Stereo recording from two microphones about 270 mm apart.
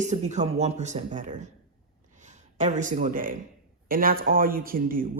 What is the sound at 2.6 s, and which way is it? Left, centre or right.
A man's voice, right.